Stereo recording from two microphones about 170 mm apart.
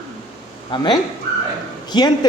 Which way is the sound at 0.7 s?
25° left (ahead or behind).